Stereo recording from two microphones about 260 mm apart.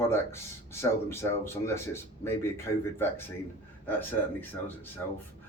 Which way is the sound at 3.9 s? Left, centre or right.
Centre.